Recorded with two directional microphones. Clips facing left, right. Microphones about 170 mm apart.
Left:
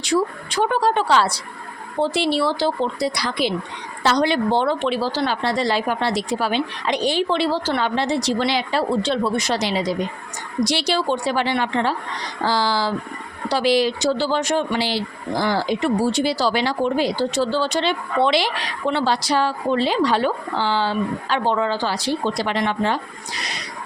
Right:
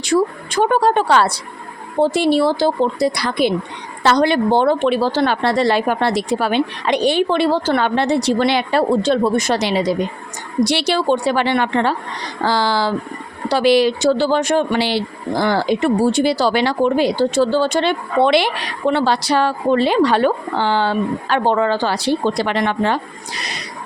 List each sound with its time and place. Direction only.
0.0 s speech: 50° right (ahead or behind)